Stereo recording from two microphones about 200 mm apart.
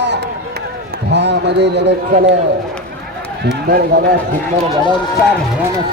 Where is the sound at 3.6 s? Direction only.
50° right (ahead or behind).